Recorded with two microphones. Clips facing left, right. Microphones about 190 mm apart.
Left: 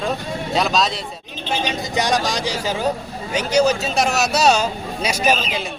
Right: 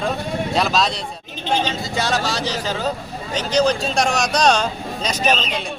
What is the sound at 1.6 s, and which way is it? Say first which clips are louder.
A man's voice: left 2 dB; 15° left (ahead or behind).